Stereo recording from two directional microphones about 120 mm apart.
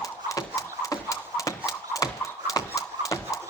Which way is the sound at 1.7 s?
30° left (ahead or behind).